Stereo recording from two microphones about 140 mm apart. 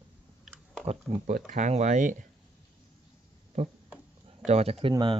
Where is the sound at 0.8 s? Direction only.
60° right (ahead or behind).